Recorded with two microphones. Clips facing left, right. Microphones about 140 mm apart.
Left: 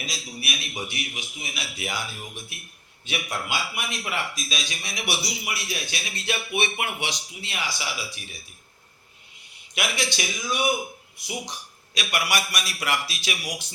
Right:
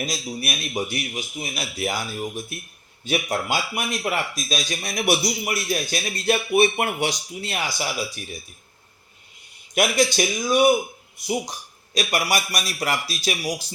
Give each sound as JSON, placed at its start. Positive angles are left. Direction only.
{"t": 0.0, "sound": "a man's voice", "side_deg": -45}
{"t": 9.7, "sound": "speech", "side_deg": -45}
{"t": 11.9, "sound": "a man's voice", "side_deg": -40}